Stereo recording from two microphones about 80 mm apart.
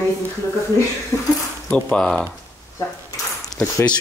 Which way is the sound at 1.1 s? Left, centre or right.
Left.